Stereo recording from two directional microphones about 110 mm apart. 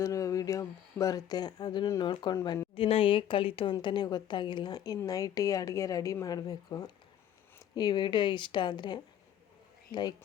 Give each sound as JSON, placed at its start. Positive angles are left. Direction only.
{"t": 0.0, "sound": "a sound", "side_deg": 30}
{"t": 1.9, "sound": "a woman's voice", "side_deg": 40}
{"t": 2.7, "sound": "a woman's voice", "side_deg": 55}